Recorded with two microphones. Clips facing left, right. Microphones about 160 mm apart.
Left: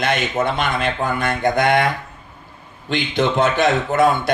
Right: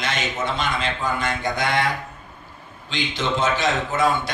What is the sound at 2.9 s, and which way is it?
A man's voice, 60° left (ahead or behind).